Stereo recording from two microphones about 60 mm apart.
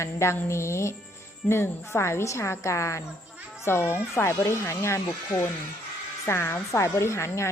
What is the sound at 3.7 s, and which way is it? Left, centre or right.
A woman's voice, left.